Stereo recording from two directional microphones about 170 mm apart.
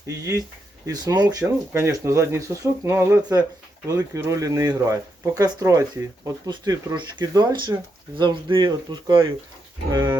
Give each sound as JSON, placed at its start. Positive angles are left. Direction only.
{"t": 0.9, "sound": "speech", "side_deg": -25}